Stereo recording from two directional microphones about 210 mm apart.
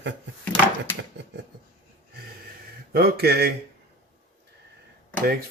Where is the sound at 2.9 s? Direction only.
45° right (ahead or behind).